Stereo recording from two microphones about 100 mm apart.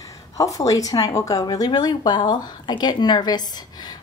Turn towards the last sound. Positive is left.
turn(degrees=40)  # may be behind; listen again after turning